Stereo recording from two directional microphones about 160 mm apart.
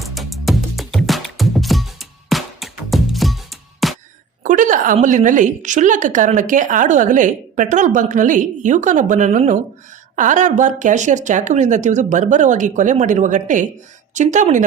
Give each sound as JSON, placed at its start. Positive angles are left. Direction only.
{"t": 0.0, "sound": "music", "side_deg": 0}
{"t": 4.4, "sound": "a sound", "side_deg": -55}
{"t": 5.0, "sound": "a woman's voice", "side_deg": -55}